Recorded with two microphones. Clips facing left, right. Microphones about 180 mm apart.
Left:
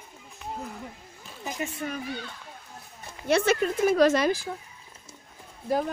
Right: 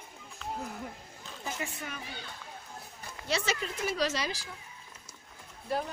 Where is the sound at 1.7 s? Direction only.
35° left (ahead or behind).